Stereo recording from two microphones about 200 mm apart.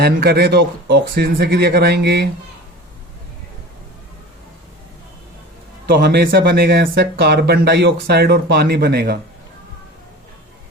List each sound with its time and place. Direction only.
0.0 s speech: 55° right (ahead or behind)
5.8 s speech: 55° right (ahead or behind)